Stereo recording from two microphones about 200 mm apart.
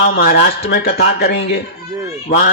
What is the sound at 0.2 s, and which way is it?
A man's voice, 55° left (ahead or behind).